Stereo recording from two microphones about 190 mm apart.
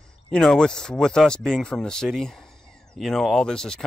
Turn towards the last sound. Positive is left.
turn(degrees=5)  # may be behind; listen again after turning